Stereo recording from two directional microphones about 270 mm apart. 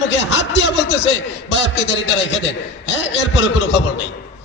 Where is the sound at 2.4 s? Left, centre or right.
Left.